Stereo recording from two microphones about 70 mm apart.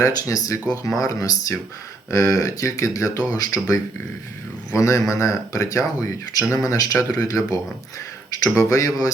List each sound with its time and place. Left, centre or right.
0.0 s speech: left
4.7 s speech: left